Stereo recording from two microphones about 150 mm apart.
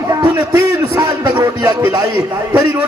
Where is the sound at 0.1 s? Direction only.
25° right (ahead or behind).